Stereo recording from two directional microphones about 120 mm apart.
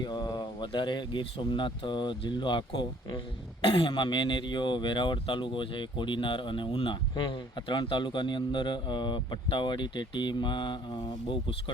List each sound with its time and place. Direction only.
0.0 s speech: 35° left (ahead or behind)